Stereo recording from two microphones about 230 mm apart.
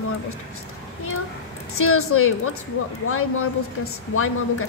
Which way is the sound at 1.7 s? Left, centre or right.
Left.